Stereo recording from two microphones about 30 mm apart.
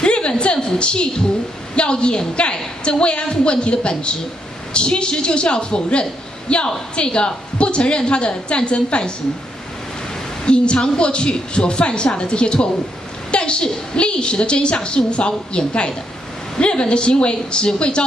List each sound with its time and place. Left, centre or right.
0.0 s a sound: left
0.4 s a woman's voice: left
10.4 s a woman's voice: left